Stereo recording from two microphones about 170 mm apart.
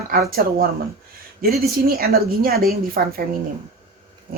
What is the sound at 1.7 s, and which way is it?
A woman's voice, 65° right (ahead or behind).